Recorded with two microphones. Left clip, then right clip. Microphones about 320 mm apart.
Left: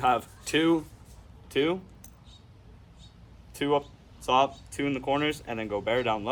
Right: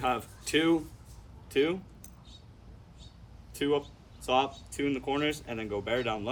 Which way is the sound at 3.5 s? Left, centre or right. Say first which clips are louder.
Left 3 dB; centre.